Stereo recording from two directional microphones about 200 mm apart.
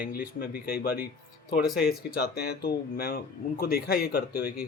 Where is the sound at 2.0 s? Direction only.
50° left (ahead or behind).